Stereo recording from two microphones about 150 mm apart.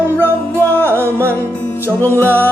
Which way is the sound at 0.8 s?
15° right (ahead or behind).